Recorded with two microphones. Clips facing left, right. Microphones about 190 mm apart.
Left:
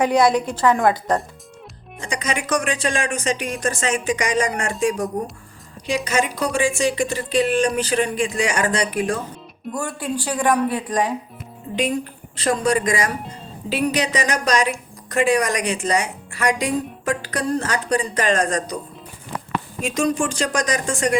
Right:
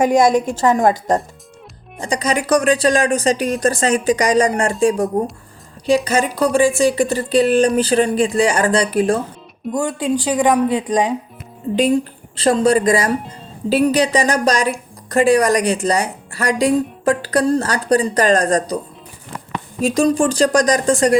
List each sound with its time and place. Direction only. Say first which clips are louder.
0.0 s a woman's voice: right 3 dB; 45° right (ahead or behind)
2.0 s speech: right 6 dB; 35° right (ahead or behind)
6.1 s speech: right 5 dB; 35° right (ahead or behind)
9.7 s speech: right 7 dB; 20° right (ahead or behind)
12.4 s speech: right 6 dB; 30° right (ahead or behind)
19.8 s speech: right 7 dB; 35° right (ahead or behind)